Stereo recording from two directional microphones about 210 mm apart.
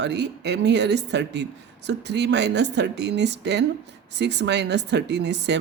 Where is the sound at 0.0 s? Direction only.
55° right (ahead or behind).